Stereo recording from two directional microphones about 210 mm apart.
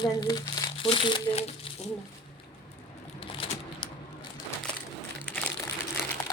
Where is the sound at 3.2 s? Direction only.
25° left (ahead or behind).